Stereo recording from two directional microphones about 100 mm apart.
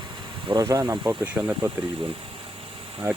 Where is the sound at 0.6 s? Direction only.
35° right (ahead or behind).